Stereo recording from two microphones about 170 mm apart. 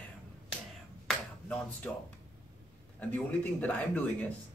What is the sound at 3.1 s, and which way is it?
Speech, 10° left (ahead or behind).